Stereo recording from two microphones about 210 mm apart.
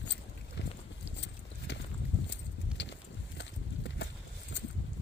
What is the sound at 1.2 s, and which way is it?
Horse, 55° left (ahead or behind).